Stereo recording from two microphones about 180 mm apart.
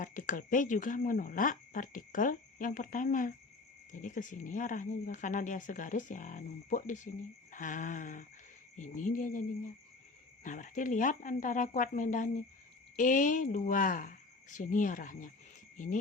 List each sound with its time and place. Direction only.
0.0 s speech: 45° left (ahead or behind)